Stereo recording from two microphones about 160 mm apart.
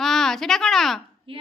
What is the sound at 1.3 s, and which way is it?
Speech, 35° right (ahead or behind).